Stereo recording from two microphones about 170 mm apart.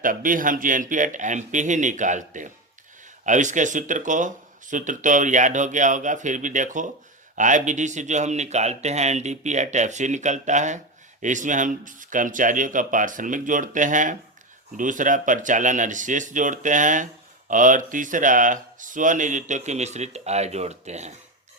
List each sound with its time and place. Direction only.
0.0 s speech: 55° right (ahead or behind)